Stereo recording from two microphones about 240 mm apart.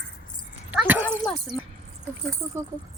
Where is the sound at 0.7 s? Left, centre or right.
Centre.